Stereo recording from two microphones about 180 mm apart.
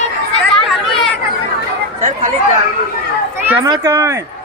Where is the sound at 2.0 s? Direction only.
45° right (ahead or behind).